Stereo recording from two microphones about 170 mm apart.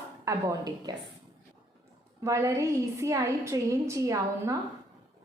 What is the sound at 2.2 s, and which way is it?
A woman's voice, 20° right (ahead or behind).